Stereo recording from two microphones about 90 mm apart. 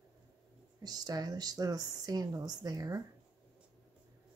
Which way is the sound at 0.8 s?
45° right (ahead or behind).